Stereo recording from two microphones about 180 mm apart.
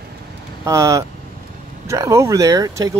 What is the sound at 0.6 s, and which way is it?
Speech, 15° right (ahead or behind).